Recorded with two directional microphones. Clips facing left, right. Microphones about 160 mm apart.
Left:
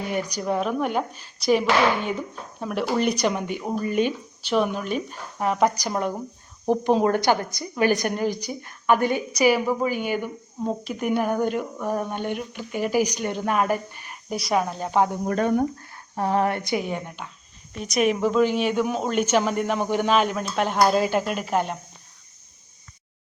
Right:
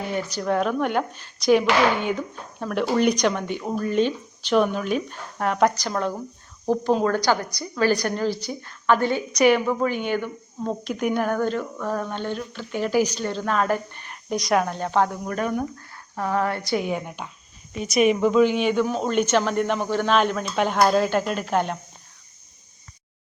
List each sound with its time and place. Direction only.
0.1 s speech: 15° left (ahead or behind)
11.3 s speech: 15° left (ahead or behind)
15.1 s speech: 30° left (ahead or behind)
16.7 s speech: centre (ahead or behind)
19.8 s speech: 15° left (ahead or behind)
20.1 s speech: 5° left (ahead or behind)